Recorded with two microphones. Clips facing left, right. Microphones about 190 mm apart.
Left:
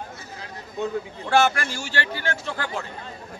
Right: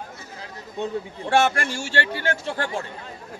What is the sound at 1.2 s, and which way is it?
Speech, 30° right (ahead or behind).